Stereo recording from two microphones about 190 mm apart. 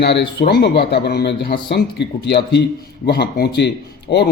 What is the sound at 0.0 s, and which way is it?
A man's voice, 60° left (ahead or behind).